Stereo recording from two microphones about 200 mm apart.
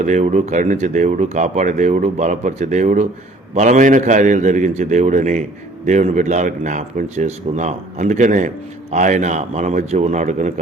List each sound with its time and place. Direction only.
0.0 s speech: 35° right (ahead or behind)